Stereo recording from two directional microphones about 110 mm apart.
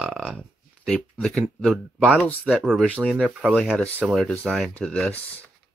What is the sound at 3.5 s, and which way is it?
Speech, centre (ahead or behind).